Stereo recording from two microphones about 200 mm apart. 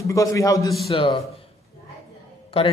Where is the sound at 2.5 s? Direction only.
30° left (ahead or behind).